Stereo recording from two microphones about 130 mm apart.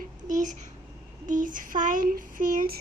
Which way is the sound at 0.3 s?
75° right (ahead or behind).